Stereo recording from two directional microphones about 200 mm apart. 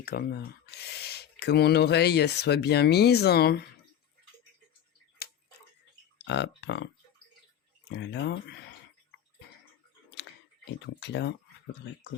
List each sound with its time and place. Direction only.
0.0 s speech: 50° left (ahead or behind)
5.2 s tick-tock: 50° left (ahead or behind)
6.2 s speech: 65° left (ahead or behind)
7.9 s speech: 60° left (ahead or behind)
10.7 s speech: 60° left (ahead or behind)